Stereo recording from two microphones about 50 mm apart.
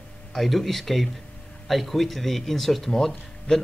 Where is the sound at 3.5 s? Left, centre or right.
Centre.